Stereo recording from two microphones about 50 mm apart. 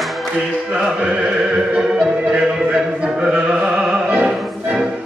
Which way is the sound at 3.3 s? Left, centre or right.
Centre.